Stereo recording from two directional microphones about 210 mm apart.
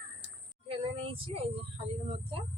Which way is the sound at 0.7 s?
25° right (ahead or behind).